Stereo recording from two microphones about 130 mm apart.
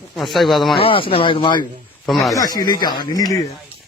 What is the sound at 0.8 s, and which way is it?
Speech, 45° left (ahead or behind).